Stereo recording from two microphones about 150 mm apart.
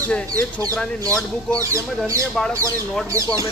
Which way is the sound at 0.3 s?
25° right (ahead or behind).